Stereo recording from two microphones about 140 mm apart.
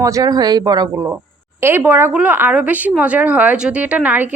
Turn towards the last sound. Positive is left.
turn(degrees=-10)  # may be behind; listen again after turning